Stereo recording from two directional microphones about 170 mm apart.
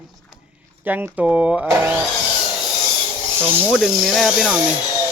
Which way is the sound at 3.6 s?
Centre (ahead or behind).